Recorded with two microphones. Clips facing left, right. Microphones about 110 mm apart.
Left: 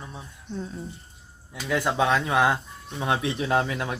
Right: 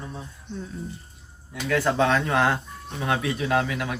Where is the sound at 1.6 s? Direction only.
15° left (ahead or behind).